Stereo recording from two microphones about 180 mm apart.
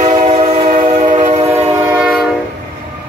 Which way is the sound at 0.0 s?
35° right (ahead or behind).